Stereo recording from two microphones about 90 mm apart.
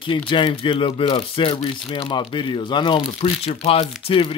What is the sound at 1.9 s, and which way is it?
Speech, 60° left (ahead or behind).